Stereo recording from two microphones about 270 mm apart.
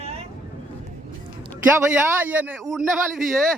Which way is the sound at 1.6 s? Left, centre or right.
Centre.